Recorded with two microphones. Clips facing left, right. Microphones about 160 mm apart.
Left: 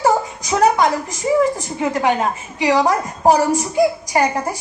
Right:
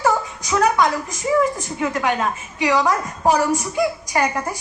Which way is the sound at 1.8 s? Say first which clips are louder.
Left 3 dB; 30° left (ahead or behind).